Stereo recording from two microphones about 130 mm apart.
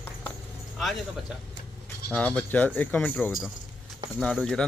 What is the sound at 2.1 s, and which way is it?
Speech, 10° left (ahead or behind).